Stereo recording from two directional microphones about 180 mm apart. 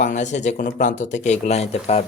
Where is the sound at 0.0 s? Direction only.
40° left (ahead or behind).